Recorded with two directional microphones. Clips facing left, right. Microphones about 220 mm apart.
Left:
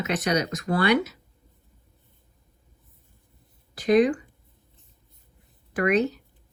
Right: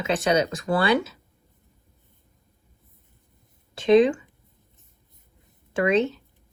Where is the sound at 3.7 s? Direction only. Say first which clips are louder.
Right 3 dB; 25° right (ahead or behind).